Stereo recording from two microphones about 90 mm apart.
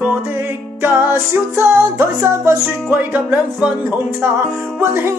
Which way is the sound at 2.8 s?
20° right (ahead or behind).